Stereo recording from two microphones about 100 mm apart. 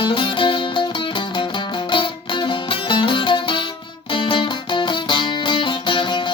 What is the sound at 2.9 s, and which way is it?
Music, 55° left (ahead or behind).